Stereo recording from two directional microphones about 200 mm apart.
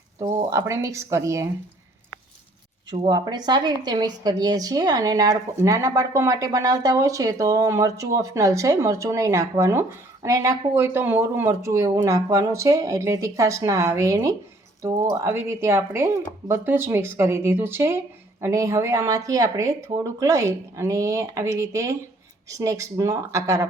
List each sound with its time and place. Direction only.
0.2 s a woman's voice: 15° right (ahead or behind)
2.9 s a woman's voice: 20° right (ahead or behind)